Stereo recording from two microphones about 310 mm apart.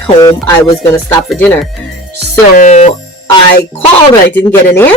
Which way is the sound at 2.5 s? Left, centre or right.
Left.